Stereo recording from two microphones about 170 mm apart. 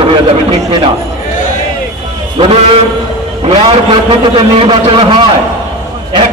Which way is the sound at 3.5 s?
30° right (ahead or behind).